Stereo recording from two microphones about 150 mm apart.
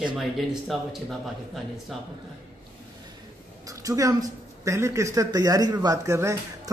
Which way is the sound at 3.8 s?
20° right (ahead or behind).